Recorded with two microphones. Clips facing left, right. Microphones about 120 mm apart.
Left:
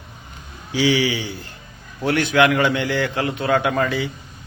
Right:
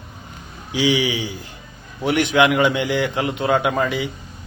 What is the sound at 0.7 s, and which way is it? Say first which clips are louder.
A man's voice: even; 15° right (ahead or behind).